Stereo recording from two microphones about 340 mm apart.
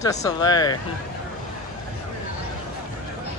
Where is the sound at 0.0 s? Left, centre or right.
Centre.